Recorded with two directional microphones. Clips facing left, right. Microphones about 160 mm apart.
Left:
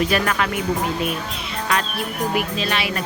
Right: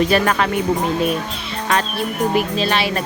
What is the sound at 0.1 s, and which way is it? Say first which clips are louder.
Speech: right 4 dB; 35° right (ahead or behind).